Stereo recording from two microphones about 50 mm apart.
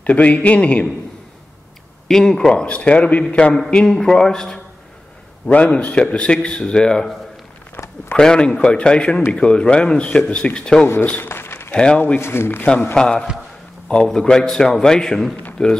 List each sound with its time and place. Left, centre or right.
0.0 s a man's voice: left
2.0 s a man's voice: centre
2.5 s a man's voice: left
3.7 s a man's voice: centre
5.7 s a man's voice: left
8.2 s a man's voice: centre
11.2 s a sound: left
11.7 s speech: centre
12.2 s speech: left
12.9 s a man's voice: centre